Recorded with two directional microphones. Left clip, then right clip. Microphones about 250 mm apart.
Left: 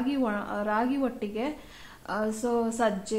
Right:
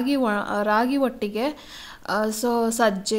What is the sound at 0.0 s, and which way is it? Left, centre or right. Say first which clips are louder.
A woman's voice: right 6 dB; right.